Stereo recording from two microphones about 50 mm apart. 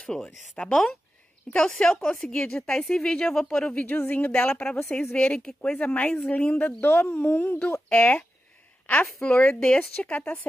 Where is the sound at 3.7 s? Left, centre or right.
Left.